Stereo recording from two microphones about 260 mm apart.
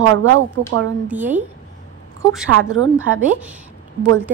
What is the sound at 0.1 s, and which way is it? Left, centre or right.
Speech, right.